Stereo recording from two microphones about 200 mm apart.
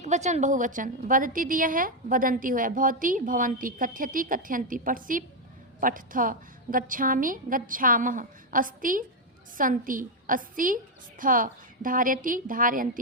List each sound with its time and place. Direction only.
0.0 s a woman's voice: 35° right (ahead or behind)